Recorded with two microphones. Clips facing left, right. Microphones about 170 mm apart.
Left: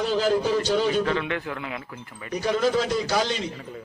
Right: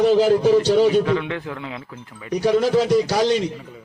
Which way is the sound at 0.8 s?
10° right (ahead or behind).